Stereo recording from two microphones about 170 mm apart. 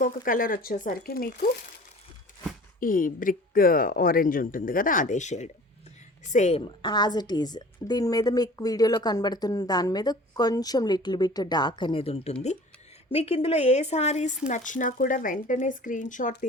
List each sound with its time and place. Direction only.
0.0 s speech: 55° left (ahead or behind)
2.8 s speech: 55° left (ahead or behind)
6.7 s a woman's voice: 25° left (ahead or behind); by 16.3 s 50° left (ahead or behind)